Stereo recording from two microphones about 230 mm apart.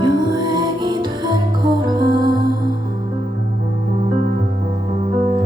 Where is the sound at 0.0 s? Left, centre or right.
Centre.